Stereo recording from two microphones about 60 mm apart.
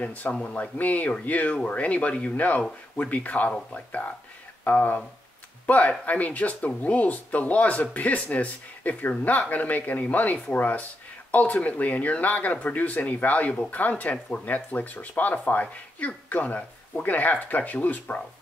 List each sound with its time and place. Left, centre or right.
0.0 s speech: left